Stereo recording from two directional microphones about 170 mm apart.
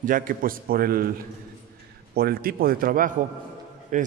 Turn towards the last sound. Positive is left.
turn(degrees=-50)  # may be behind; listen again after turning